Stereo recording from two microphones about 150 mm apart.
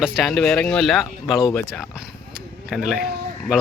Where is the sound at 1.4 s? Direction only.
15° left (ahead or behind).